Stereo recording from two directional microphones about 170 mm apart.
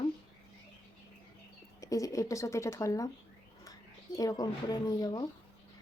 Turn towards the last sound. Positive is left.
turn(degrees=25)  # may be behind; listen again after turning